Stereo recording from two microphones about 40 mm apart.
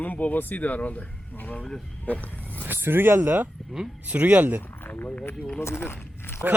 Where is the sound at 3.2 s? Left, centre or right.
Right.